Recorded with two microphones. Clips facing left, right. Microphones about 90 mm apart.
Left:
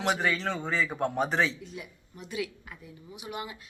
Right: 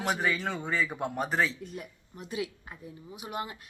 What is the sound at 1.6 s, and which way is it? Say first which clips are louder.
Speech: right 1 dB; 45° right (ahead or behind).